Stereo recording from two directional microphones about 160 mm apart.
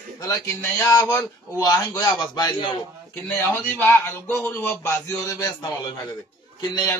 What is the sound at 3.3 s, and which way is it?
A man's voice, 10° left (ahead or behind).